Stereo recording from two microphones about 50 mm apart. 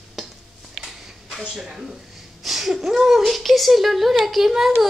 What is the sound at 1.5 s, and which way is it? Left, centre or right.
Speech, centre.